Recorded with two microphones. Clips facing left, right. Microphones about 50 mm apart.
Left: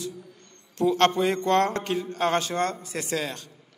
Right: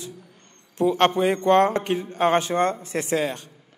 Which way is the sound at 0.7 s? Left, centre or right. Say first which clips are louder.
Right 2 dB; centre.